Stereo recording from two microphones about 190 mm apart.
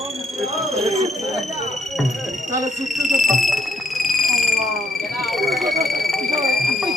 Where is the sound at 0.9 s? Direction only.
35° right (ahead or behind).